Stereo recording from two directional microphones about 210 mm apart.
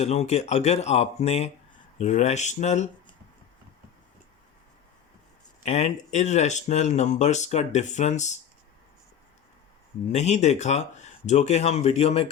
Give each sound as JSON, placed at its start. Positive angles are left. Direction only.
{"t": 0.0, "sound": "speech", "side_deg": 30}
{"t": 5.6, "sound": "speech", "side_deg": 30}
{"t": 10.1, "sound": "speech", "side_deg": 35}